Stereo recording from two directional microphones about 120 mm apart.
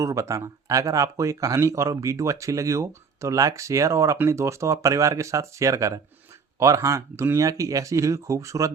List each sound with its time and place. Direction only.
0.0 s speech: 25° right (ahead or behind)